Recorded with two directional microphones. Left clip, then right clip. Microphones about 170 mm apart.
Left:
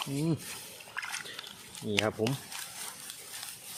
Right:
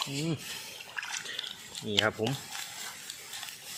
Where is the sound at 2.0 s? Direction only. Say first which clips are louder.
Right 2 dB; 10° left (ahead or behind).